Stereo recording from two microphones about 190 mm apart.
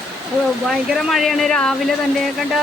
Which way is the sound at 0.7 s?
Centre (ahead or behind).